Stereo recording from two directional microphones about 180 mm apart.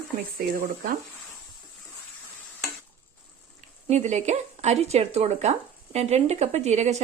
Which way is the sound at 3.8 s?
40° right (ahead or behind).